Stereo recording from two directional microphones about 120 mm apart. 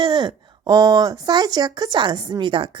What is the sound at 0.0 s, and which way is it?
A woman's voice, 35° right (ahead or behind).